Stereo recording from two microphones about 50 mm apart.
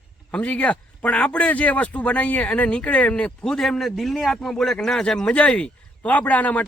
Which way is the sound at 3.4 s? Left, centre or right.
Centre.